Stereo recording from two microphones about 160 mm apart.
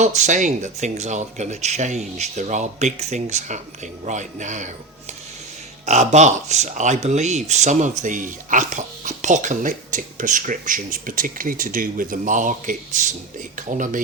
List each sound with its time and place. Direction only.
0.0 s speech: 45° right (ahead or behind)
5.8 s speech: 45° right (ahead or behind)